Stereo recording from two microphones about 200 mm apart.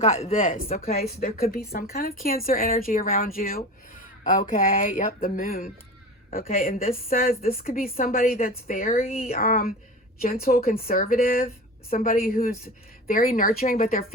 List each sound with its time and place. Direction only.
0.0 s speech: 30° left (ahead or behind)